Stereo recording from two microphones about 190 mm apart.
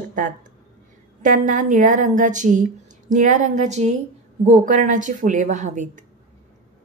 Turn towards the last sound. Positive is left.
turn(degrees=-40)  # may be behind; listen again after turning